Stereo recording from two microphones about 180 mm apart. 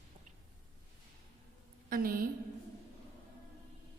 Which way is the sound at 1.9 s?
50° right (ahead or behind).